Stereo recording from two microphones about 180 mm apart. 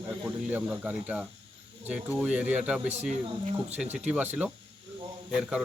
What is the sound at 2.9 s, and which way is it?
Speech, 40° right (ahead or behind).